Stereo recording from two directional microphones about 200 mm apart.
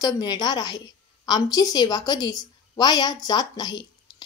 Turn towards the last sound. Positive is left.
turn(degrees=20)  # may be behind; listen again after turning